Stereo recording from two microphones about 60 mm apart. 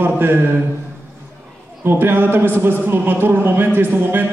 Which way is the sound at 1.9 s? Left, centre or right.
Right.